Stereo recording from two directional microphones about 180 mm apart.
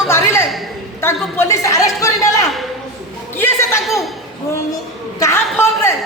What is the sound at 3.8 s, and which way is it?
Speech, centre (ahead or behind).